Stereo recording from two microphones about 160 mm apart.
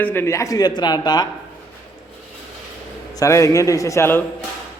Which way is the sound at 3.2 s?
20° left (ahead or behind).